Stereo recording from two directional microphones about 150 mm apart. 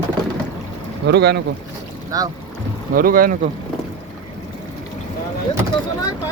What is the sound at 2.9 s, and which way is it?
Speech, 70° right (ahead or behind).